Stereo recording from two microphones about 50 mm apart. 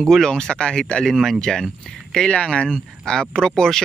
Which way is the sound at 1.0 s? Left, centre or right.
Centre.